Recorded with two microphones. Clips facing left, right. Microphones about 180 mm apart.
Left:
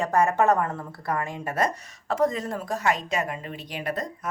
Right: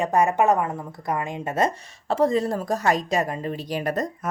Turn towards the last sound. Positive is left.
turn(degrees=-45)  # may be behind; listen again after turning